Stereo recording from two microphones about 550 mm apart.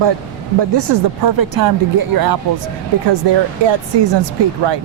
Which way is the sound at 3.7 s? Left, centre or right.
Right.